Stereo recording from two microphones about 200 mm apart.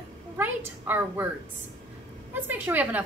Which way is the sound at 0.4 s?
10° right (ahead or behind).